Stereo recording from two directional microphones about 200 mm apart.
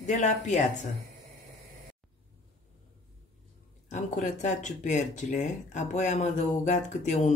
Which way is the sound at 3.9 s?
35° left (ahead or behind).